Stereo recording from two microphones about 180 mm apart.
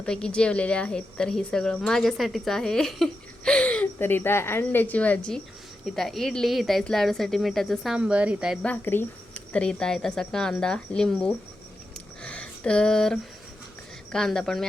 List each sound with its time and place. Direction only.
0.0 s a woman's voice: 5° left (ahead or behind)
8.6 s a woman's voice: 10° left (ahead or behind)
12.2 s a sound: 5° left (ahead or behind)
14.1 s a woman's voice: 5° left (ahead or behind)